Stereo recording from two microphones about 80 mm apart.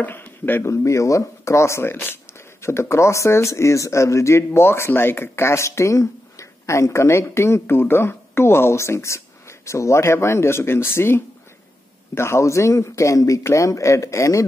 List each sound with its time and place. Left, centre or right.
0.0 s speech: left
0.7 s speech: left